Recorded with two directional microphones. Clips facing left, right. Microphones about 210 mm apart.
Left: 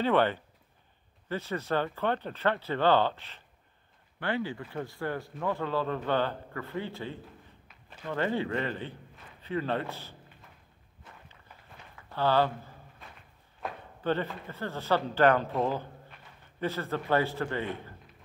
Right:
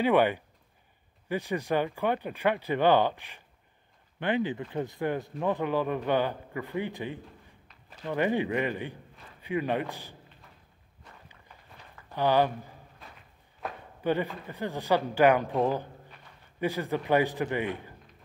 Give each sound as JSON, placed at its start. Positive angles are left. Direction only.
{"t": 0.0, "sound": "a man's voice", "side_deg": -15}
{"t": 12.1, "sound": "speech", "side_deg": -15}
{"t": 13.6, "sound": "a sound", "side_deg": 0}
{"t": 14.0, "sound": "a man's voice", "side_deg": -15}